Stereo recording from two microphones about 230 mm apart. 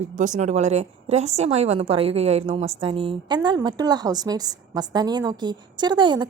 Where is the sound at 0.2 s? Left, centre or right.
Right.